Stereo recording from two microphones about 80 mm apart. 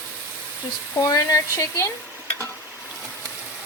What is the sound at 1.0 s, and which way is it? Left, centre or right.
Speech, left.